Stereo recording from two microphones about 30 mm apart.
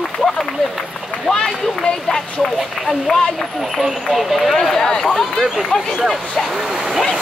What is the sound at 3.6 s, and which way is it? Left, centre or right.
Speech, centre.